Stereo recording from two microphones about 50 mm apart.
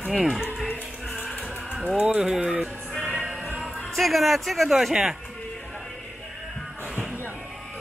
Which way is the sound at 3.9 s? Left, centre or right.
Centre.